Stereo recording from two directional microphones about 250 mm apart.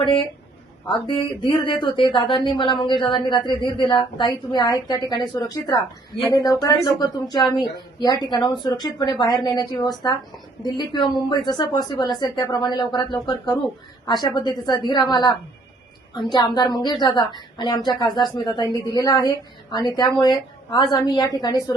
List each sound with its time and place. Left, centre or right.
0.9 s a woman's voice: centre